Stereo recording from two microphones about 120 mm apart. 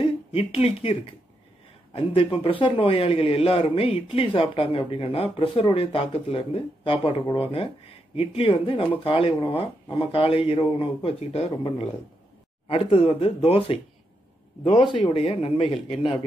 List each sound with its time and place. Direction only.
0.0 s a man's voice: 50° left (ahead or behind)
12.6 s a man's voice: 50° left (ahead or behind)
14.9 s a man's voice: 50° left (ahead or behind)